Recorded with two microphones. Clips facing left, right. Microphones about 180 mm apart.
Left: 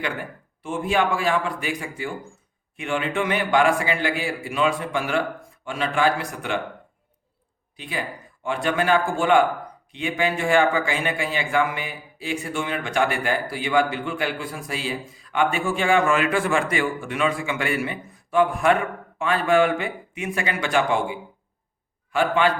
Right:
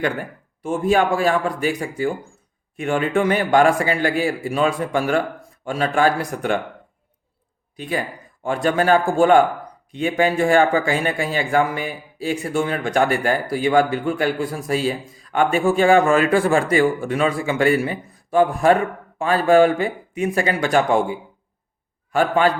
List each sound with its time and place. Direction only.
0.6 s a man's voice: 45° right (ahead or behind)
7.8 s a man's voice: 45° right (ahead or behind)